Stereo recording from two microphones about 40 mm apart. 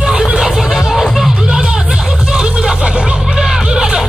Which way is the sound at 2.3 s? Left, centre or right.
Centre.